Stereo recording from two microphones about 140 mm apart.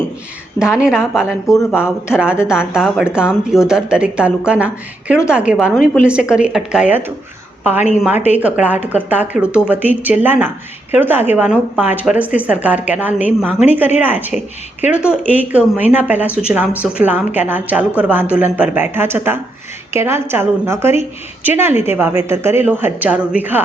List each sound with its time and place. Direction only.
0.6 s speech: 5° right (ahead or behind)
1.5 s speech: 20° left (ahead or behind)
2.1 s a woman's voice: 5° right (ahead or behind)